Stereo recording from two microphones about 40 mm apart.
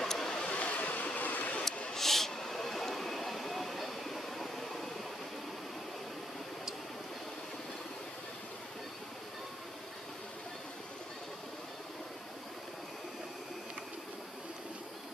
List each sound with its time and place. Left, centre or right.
0.0 s waves: centre
0.3 s vehicle: left
2.0 s vehicle: centre